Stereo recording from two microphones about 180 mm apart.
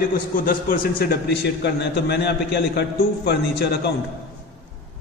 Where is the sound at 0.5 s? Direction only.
50° left (ahead or behind).